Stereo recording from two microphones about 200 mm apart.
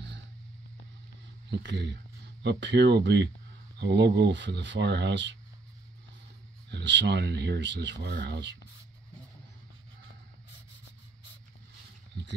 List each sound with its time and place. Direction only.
1.5 s speech: 60° right (ahead or behind)
6.7 s speech: 60° right (ahead or behind)